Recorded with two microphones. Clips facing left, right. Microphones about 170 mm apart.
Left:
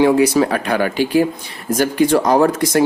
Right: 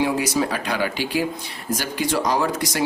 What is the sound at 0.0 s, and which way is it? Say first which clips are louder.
Speech: left 8 dB; 60° left (ahead or behind).